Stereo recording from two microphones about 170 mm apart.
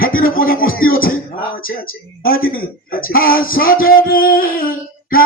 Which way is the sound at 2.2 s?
60° left (ahead or behind).